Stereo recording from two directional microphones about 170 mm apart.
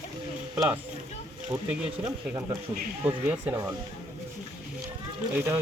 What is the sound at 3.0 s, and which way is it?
Speech, 10° right (ahead or behind).